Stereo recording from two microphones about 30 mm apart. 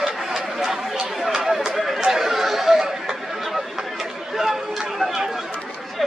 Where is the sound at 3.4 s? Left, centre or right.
Centre.